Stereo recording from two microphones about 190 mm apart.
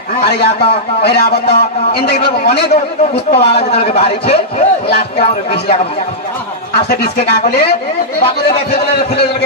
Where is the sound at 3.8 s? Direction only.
30° left (ahead or behind).